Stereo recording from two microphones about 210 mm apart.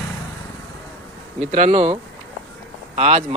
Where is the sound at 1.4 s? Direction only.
30° right (ahead or behind).